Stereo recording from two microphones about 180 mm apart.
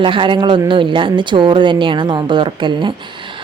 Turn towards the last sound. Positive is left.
turn(degrees=-25)  # may be behind; listen again after turning